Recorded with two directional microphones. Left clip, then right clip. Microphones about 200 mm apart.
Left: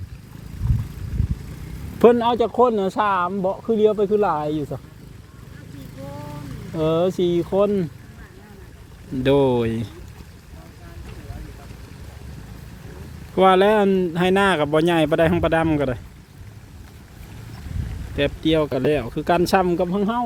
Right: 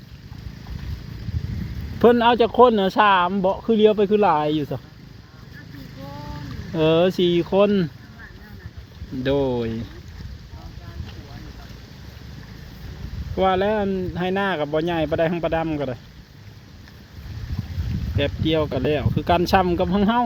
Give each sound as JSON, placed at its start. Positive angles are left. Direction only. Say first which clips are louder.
{"t": 2.1, "sound": "speech", "louder": "right 3 dB", "side_deg": -10}
{"t": 6.7, "sound": "speech", "louder": "right 2 dB", "side_deg": -15}
{"t": 9.2, "sound": "speech", "louder": "left 4 dB", "side_deg": 15}
{"t": 13.3, "sound": "speech", "louder": "left 5 dB", "side_deg": 25}
{"t": 18.2, "sound": "speech", "louder": "left 2 dB", "side_deg": 10}